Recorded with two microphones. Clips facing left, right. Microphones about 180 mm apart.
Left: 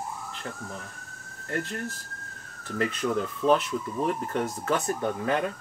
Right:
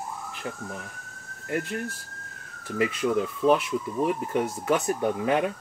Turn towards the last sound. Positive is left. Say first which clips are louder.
# right 3 dB
turn(degrees=-15)  # may be behind; listen again after turning